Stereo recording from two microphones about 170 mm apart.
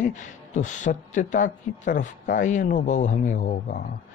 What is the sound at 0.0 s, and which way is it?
A man's voice, 45° left (ahead or behind).